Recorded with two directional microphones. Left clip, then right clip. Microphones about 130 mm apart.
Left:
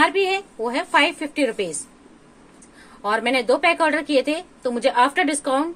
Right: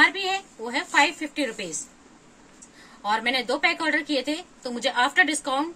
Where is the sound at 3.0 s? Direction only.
50° left (ahead or behind).